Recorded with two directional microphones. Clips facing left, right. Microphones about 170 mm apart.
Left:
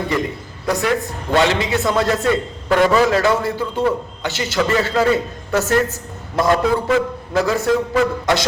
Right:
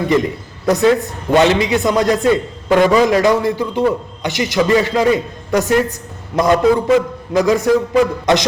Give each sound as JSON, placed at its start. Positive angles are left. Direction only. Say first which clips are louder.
{"t": 0.7, "sound": "a man's voice", "louder": "right 6 dB", "side_deg": -20}